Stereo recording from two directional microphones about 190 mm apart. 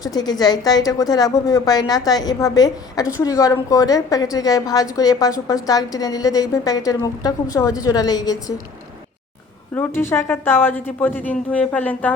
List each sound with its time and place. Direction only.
0.1 s a woman's voice: 20° left (ahead or behind)
9.7 s a woman's voice: 10° left (ahead or behind)